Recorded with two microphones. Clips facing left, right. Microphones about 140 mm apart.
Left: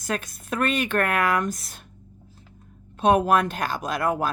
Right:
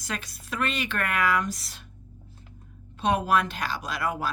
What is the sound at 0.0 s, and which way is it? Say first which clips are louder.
Speech: left 6 dB; 50° left (ahead or behind).